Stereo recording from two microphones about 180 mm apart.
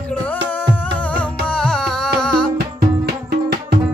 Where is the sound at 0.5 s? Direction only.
10° left (ahead or behind).